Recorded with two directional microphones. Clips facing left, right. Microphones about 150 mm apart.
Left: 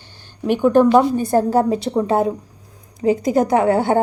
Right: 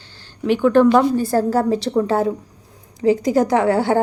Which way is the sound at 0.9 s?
20° left (ahead or behind).